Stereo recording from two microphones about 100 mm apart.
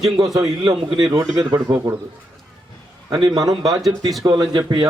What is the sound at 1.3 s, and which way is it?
Speech, 30° right (ahead or behind).